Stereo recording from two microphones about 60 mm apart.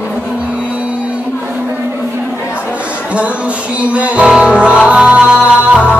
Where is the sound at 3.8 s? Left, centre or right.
Right.